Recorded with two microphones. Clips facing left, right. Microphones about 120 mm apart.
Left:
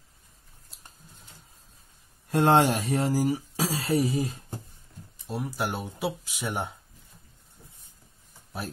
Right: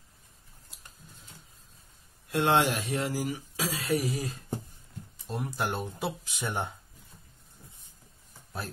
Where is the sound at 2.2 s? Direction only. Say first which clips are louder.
Left 4 dB; 40° left (ahead or behind).